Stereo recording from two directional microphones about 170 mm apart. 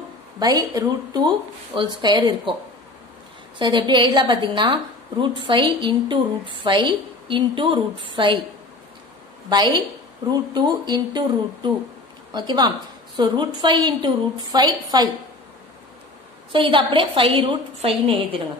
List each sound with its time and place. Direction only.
0.4 s a woman's voice: 20° right (ahead or behind)
3.5 s a woman's voice: 30° right (ahead or behind)
9.5 s a woman's voice: 25° right (ahead or behind)
16.5 s a woman's voice: 30° right (ahead or behind)